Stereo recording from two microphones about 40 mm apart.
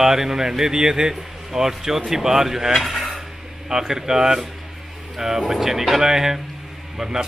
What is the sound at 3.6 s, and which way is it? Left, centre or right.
Speech, centre.